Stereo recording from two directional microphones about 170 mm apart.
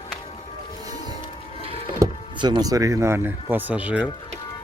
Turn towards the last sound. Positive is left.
turn(degrees=-10)  # may be behind; listen again after turning